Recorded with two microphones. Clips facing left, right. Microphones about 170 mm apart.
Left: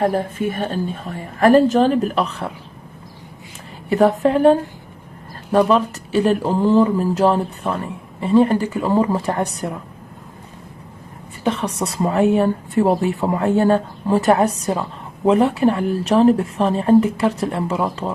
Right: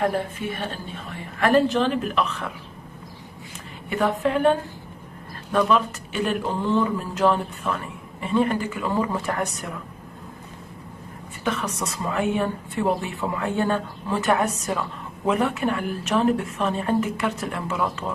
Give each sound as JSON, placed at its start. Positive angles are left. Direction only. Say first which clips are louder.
{"t": 0.0, "sound": "speech", "louder": "left 5 dB", "side_deg": 40}
{"t": 3.9, "sound": "speech", "louder": "left 7 dB", "side_deg": 40}
{"t": 11.4, "sound": "speech", "louder": "left 6 dB", "side_deg": 30}